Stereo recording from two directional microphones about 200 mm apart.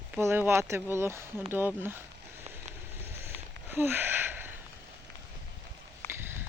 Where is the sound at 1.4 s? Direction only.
10° right (ahead or behind).